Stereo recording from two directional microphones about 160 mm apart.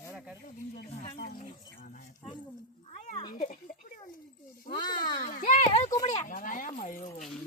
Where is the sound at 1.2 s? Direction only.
65° left (ahead or behind).